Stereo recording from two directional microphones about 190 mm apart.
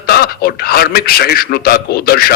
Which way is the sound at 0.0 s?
55° left (ahead or behind).